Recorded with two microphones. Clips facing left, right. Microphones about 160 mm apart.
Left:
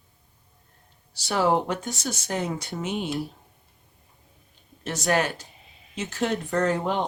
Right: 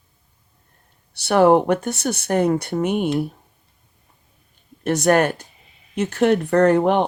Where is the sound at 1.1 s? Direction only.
65° right (ahead or behind).